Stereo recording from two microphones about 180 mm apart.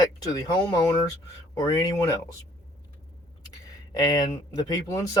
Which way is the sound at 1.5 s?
20° left (ahead or behind).